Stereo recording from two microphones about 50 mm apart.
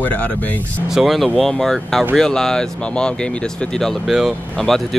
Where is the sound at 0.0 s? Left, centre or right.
Left.